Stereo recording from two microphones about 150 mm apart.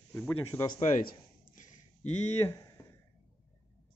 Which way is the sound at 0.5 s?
15° left (ahead or behind).